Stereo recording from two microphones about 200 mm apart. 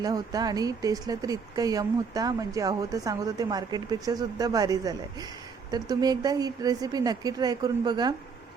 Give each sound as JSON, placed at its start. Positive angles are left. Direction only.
{"t": 0.0, "sound": "speech", "side_deg": -20}